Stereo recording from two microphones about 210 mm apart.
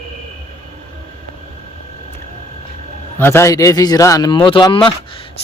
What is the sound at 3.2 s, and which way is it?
A man's voice, 10° left (ahead or behind).